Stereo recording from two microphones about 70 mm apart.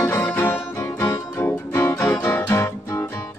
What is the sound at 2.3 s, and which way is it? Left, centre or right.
Guitar, left.